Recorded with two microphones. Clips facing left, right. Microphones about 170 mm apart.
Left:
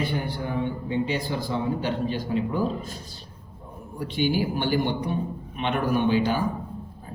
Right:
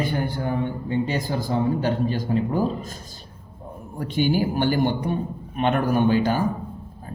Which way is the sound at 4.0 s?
45° right (ahead or behind).